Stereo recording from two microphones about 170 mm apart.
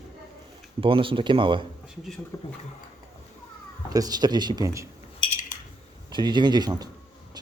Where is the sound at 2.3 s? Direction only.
20° left (ahead or behind).